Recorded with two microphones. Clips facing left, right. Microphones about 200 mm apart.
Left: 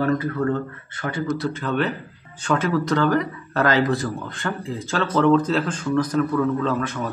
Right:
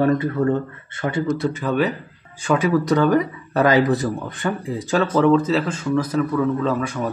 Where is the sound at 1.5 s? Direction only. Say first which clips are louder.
Right 3 dB; 10° right (ahead or behind).